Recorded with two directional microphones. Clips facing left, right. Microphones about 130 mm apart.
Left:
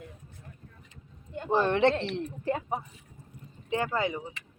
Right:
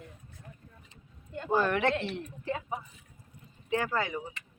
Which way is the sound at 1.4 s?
25° left (ahead or behind).